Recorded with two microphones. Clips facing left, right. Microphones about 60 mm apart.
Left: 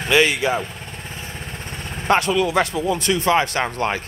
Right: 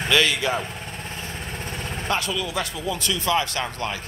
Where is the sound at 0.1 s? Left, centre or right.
Left.